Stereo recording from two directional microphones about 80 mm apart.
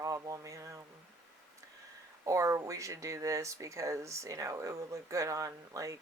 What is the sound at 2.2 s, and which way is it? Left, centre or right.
Speech, right.